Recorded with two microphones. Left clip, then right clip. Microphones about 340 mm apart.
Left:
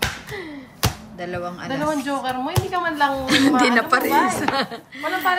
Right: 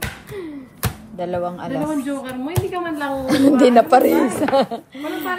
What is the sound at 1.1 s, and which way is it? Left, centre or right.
Speech, centre.